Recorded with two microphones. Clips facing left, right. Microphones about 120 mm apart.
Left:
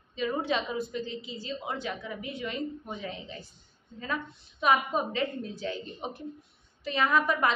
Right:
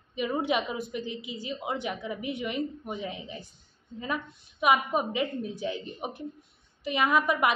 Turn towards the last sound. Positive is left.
turn(degrees=-15)  # may be behind; listen again after turning